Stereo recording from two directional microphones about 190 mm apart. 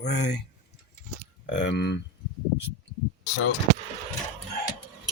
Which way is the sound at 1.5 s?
70° left (ahead or behind).